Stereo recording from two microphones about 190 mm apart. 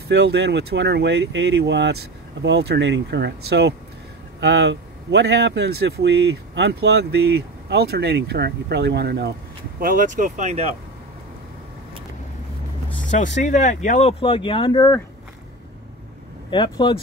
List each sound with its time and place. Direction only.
0.1 s speech: 65° right (ahead or behind)
9.8 s speech: 45° right (ahead or behind)
13.1 s speech: 40° left (ahead or behind); by 15.0 s 20° left (ahead or behind)
16.4 s speech: 25° left (ahead or behind)